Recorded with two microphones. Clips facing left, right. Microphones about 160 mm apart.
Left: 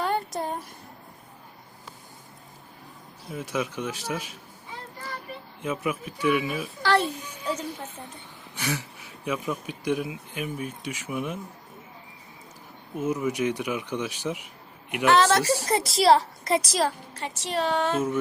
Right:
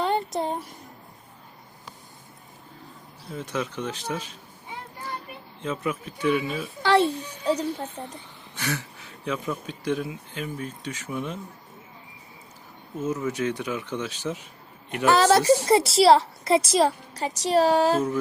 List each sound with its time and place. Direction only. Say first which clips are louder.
0.0 s a sound: right 2 dB; 25° right (ahead or behind)
3.2 s speech: even; 10° left (ahead or behind)
5.6 s speech: even; 10° left (ahead or behind)
6.8 s a child's voice: right 4 dB; 25° right (ahead or behind)
8.5 s speech: even; 15° left (ahead or behind)
13.0 s speech: left 1 dB; 15° left (ahead or behind)
15.2 s a child's voice: right 4 dB; 35° right (ahead or behind)
16.8 s a child's voice: right 4 dB; 40° right (ahead or behind)